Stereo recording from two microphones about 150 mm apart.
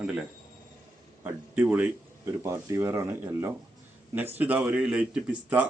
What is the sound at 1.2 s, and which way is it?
A man's voice, 15° right (ahead or behind).